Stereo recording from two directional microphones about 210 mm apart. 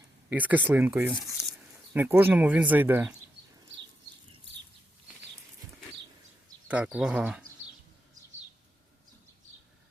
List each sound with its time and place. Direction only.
0.3 s speech: 10° right (ahead or behind)
3.4 s a sound: 55° right (ahead or behind)
6.7 s speech: 5° right (ahead or behind)